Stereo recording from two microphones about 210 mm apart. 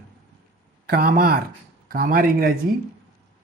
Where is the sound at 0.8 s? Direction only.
45° right (ahead or behind).